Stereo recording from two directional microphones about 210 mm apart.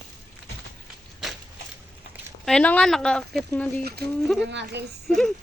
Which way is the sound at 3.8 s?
50° right (ahead or behind).